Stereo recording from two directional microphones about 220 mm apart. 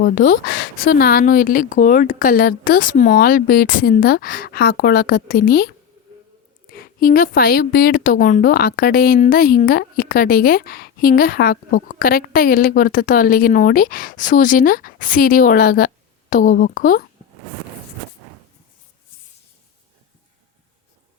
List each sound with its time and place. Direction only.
0.0 s a woman's voice: 40° left (ahead or behind)